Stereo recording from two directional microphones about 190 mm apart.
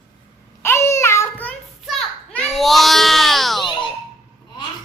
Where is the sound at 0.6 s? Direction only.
15° left (ahead or behind).